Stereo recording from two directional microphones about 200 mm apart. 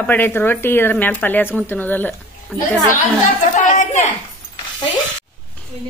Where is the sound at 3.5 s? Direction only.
40° left (ahead or behind).